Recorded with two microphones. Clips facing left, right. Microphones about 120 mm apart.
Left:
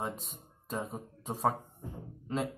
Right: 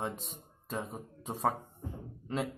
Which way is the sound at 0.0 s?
Centre (ahead or behind).